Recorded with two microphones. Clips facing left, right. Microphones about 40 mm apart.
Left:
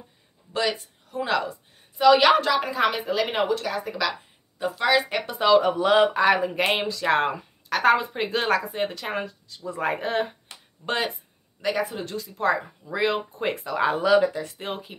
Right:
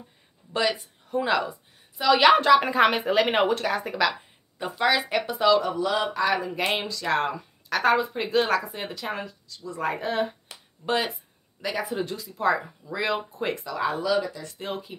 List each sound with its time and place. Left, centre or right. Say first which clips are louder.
0.5 s speech: even; centre
2.6 s speech: right 3 dB; right
4.6 s speech: left 2 dB; centre
5.6 s speech: left 6 dB; left; by 7.3 s centre
7.7 s speech: left 2 dB; centre
9.7 s speech: left 2 dB; left
9.9 s speech: left 1 dB; centre
11.8 s speech: even; centre
12.8 s speech: left 5 dB; centre
13.7 s speech: left 6 dB; left
13.9 s speech: left 9 dB; left
14.4 s speech: left 1 dB; centre